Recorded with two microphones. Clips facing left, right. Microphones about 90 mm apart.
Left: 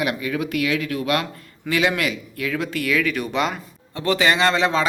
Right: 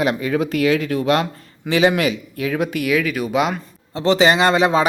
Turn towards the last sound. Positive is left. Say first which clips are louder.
# right 4 dB
turn(degrees=-15)  # may be behind; listen again after turning